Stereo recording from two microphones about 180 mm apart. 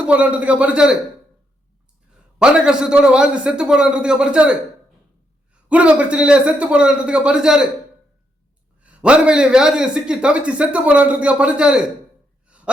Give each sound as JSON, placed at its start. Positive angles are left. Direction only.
{"t": 0.0, "sound": "a man's voice", "side_deg": -5}
{"t": 2.4, "sound": "a man's voice", "side_deg": -5}
{"t": 5.6, "sound": "a man's voice", "side_deg": -5}
{"t": 8.8, "sound": "a man's voice", "side_deg": -5}
{"t": 12.5, "sound": "gasp", "side_deg": -5}